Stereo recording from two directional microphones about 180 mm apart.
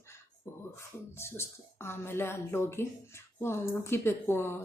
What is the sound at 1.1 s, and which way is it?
Speech, 15° left (ahead or behind).